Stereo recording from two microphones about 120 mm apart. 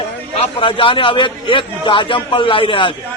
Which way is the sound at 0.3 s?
50° left (ahead or behind).